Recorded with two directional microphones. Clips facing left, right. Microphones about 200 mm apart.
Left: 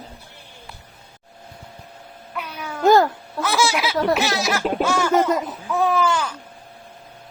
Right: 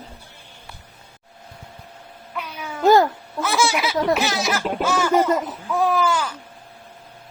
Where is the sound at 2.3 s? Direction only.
Centre (ahead or behind).